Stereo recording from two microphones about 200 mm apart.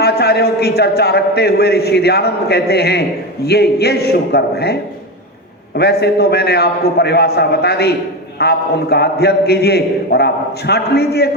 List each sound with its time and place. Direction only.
0.0 s a man's voice: 55° left (ahead or behind)